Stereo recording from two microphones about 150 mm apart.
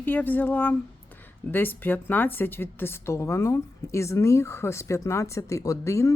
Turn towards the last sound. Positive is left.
turn(degrees=20)  # may be behind; listen again after turning